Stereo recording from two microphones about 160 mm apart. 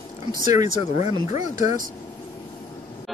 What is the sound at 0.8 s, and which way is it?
Speech, 45° left (ahead or behind).